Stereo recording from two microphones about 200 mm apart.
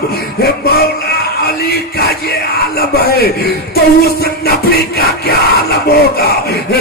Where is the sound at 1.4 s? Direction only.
50° left (ahead or behind).